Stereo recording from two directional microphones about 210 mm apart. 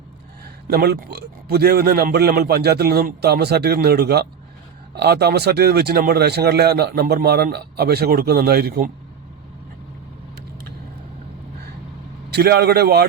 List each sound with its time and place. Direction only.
0.4 s a man's voice: 50° right (ahead or behind)
12.3 s a man's voice: 50° right (ahead or behind)